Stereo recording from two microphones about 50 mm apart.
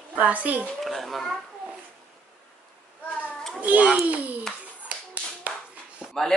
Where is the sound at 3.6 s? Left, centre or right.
Right.